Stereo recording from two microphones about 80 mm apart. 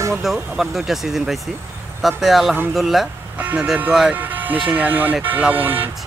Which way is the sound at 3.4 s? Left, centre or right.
Centre.